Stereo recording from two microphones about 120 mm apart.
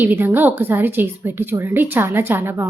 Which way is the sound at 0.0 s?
15° right (ahead or behind).